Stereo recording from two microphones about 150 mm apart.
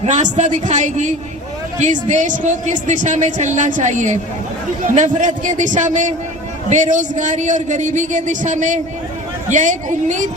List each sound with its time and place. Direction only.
0.0 s a man's voice: 55° right (ahead or behind)